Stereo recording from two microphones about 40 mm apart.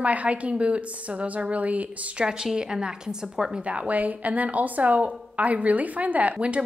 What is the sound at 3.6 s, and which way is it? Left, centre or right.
A woman's voice, right.